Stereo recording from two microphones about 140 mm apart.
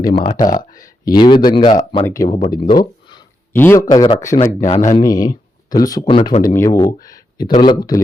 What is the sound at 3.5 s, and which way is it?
Speech, 15° left (ahead or behind).